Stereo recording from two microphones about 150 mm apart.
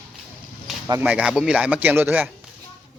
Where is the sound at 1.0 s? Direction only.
10° right (ahead or behind).